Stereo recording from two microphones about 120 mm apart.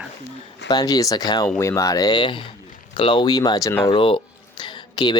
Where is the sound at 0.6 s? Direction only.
35° left (ahead or behind).